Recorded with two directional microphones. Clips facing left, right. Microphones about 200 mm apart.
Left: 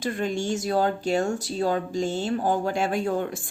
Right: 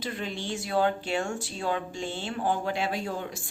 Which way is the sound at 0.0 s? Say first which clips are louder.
Left 7 dB; 45° left (ahead or behind).